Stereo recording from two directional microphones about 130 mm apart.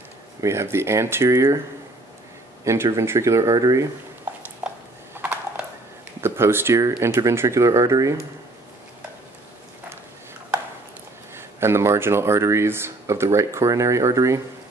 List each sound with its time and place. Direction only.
0.4 s speech: 20° right (ahead or behind)
2.6 s speech: 20° right (ahead or behind)
4.6 s a sound: 10° right (ahead or behind)
6.2 s speech: 20° right (ahead or behind)
11.3 s speech: 20° right (ahead or behind)